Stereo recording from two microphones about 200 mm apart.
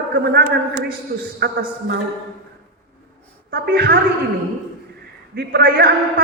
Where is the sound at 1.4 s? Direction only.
50° right (ahead or behind).